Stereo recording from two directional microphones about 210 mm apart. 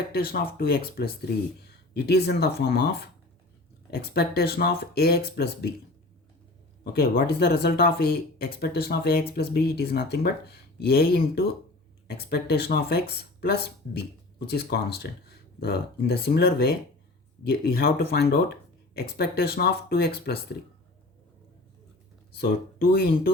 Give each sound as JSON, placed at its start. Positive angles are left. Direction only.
{"t": 0.1, "sound": "speech", "side_deg": 45}
{"t": 6.9, "sound": "speech", "side_deg": 45}
{"t": 22.4, "sound": "speech", "side_deg": 50}